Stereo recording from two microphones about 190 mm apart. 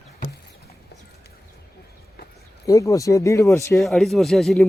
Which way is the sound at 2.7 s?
15° left (ahead or behind).